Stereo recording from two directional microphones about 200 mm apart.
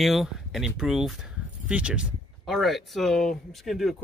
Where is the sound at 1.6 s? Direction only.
5° right (ahead or behind).